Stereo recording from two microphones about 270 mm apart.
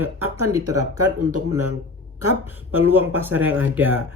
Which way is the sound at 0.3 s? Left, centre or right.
Right.